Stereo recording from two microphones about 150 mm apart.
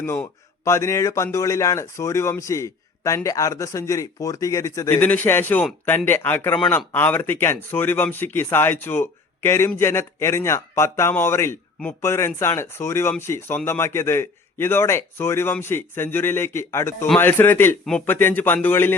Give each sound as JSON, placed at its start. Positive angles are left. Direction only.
{"t": 0.0, "sound": "speech", "side_deg": 15}